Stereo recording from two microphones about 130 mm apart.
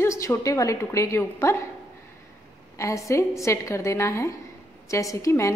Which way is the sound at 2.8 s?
25° left (ahead or behind).